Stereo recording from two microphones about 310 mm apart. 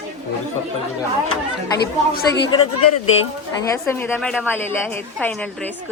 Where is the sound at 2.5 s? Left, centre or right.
Left.